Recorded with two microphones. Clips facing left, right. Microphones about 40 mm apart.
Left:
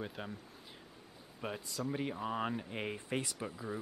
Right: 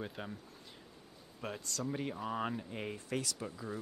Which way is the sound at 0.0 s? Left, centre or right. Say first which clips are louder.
Even; centre.